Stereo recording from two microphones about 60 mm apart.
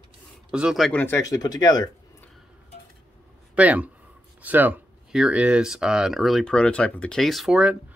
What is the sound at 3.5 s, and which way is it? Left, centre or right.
Speech, right.